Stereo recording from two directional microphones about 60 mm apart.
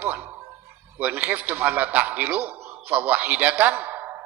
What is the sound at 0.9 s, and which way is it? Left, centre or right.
A man's voice, right.